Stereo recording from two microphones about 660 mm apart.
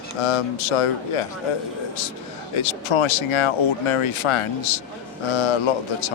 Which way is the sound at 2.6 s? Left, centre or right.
Left.